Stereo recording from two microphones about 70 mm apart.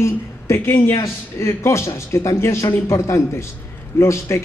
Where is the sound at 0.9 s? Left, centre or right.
Left.